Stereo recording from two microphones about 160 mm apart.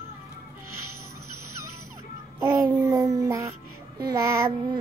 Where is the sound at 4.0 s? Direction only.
20° right (ahead or behind).